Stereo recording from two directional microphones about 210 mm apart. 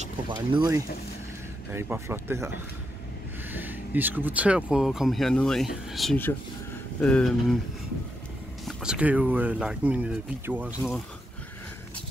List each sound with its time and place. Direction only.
0.3 s speech: 20° right (ahead or behind)
3.5 s speech: 10° right (ahead or behind)
8.6 s speech: 5° right (ahead or behind)